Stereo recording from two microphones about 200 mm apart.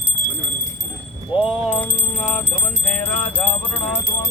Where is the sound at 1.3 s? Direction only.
Centre (ahead or behind).